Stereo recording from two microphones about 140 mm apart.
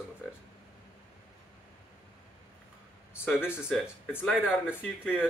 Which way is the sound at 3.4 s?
5° right (ahead or behind).